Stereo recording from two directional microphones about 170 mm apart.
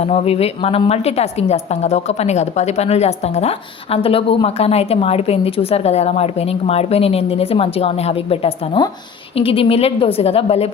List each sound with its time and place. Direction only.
0.0 s a woman's voice: 35° left (ahead or behind)